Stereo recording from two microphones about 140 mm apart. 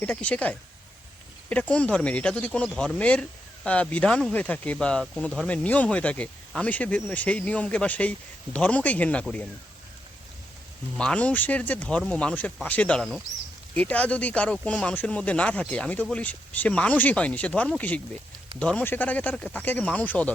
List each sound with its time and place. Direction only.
0.0 s speech: 10° left (ahead or behind)
10.9 s speech: 10° left (ahead or behind)
13.0 s speech: centre (ahead or behind)
13.7 s speech: 10° left (ahead or behind)